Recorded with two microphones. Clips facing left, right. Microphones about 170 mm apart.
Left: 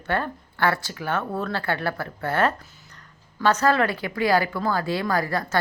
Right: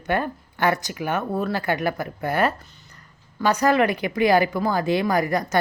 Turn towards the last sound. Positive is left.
turn(degrees=-15)  # may be behind; listen again after turning